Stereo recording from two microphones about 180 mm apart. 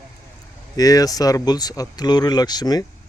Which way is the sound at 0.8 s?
20° left (ahead or behind).